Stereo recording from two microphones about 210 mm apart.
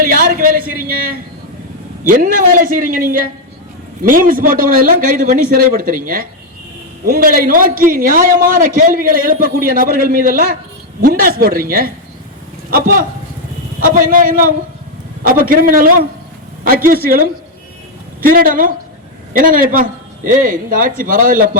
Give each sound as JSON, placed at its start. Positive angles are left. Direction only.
{"t": 0.0, "sound": "a woman's voice", "side_deg": -40}